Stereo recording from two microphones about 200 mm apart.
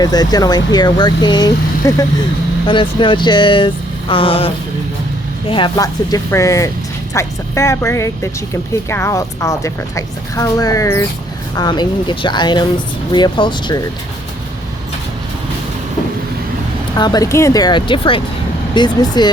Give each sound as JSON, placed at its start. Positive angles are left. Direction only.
{"t": 0.0, "sound": "a woman's voice", "side_deg": 20}
{"t": 17.0, "sound": "speech", "side_deg": 20}